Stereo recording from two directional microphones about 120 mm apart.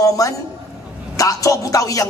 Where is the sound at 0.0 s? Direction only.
30° left (ahead or behind).